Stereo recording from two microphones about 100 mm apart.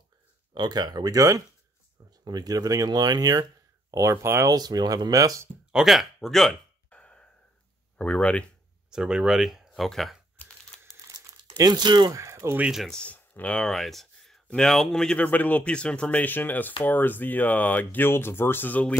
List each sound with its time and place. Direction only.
0.6 s speech: 45° right (ahead or behind)
3.9 s speech: 30° right (ahead or behind)
4.6 s speech: 40° right (ahead or behind)
5.7 s a sound: 5° right (ahead or behind); by 7.2 s 10° left (ahead or behind)
8.0 s speech: 10° left (ahead or behind)
8.9 s speech: 5° right (ahead or behind)
11.1 s crumpling: 40° right (ahead or behind)
12.1 s speech: 30° right (ahead or behind)
12.5 s speech: 10° right (ahead or behind)
12.8 s speech: 10° left (ahead or behind)